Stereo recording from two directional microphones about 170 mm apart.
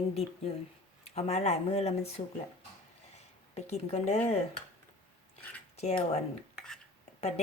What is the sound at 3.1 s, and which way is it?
Speech, 40° left (ahead or behind).